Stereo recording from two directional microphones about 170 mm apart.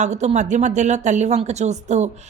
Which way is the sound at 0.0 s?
40° right (ahead or behind).